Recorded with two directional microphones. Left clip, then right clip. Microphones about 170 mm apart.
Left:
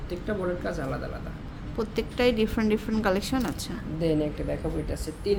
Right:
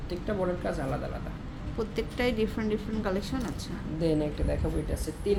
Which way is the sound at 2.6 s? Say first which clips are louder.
Left 5 dB; 35° left (ahead or behind).